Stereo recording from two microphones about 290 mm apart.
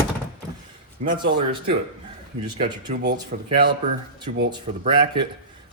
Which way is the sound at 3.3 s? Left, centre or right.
Right.